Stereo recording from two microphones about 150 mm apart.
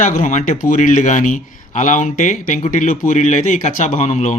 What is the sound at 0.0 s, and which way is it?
A man's voice, 55° left (ahead or behind).